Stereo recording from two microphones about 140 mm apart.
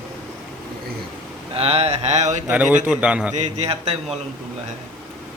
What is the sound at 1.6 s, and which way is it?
Mantra, 45° right (ahead or behind).